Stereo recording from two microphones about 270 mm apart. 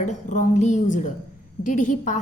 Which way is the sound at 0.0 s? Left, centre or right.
Left.